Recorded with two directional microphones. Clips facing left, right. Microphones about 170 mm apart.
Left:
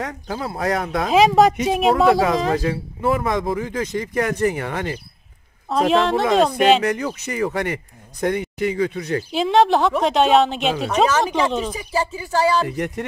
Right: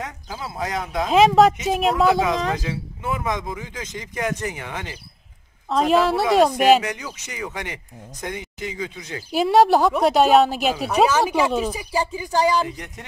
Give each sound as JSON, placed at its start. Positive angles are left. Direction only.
{"t": 0.0, "sound": "speech", "side_deg": 60}
{"t": 1.1, "sound": "speech", "side_deg": 0}
{"t": 2.5, "sound": "speech", "side_deg": 55}
{"t": 5.7, "sound": "a woman's voice", "side_deg": 0}
{"t": 6.8, "sound": "speech", "side_deg": 55}
{"t": 9.3, "sound": "a woman's voice", "side_deg": -10}
{"t": 12.6, "sound": "speech", "side_deg": 60}